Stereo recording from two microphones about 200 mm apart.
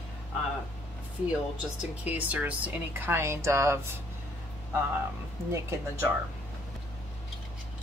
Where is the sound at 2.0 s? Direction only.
10° right (ahead or behind).